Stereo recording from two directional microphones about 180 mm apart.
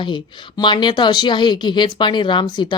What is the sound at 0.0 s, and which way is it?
Speech, 25° left (ahead or behind).